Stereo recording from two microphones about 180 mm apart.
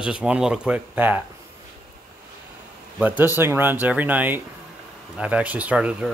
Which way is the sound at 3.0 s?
10° right (ahead or behind).